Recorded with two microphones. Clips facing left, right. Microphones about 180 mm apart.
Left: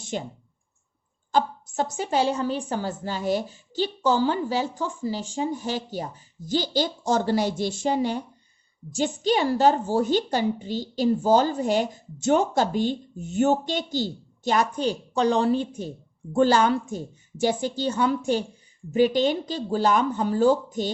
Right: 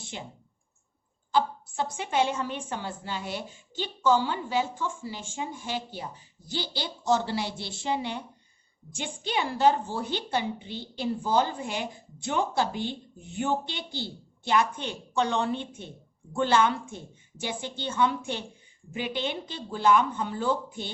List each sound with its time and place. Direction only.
0.0 s speech: 45° left (ahead or behind)
1.3 s a woman's voice: 45° left (ahead or behind)